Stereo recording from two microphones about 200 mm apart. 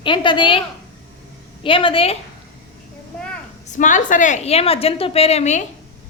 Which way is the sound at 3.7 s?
40° left (ahead or behind).